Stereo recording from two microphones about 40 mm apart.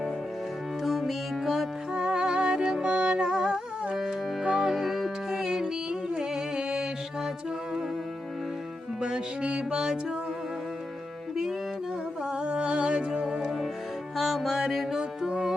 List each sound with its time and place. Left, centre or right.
0.9 s music: centre
2.0 s music: centre
3.2 s humming: centre
4.5 s music: centre
9.0 s music: right
9.7 s music: centre
12.3 s music: right
13.1 s music: centre
14.9 s music: centre